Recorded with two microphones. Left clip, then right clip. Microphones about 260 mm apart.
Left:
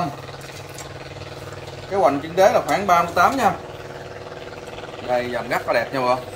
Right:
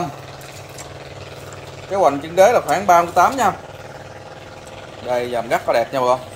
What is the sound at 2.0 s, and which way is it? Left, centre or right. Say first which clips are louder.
Speech: right 3 dB; right.